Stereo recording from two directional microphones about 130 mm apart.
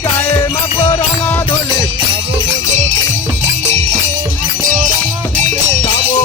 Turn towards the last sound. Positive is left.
turn(degrees=-90)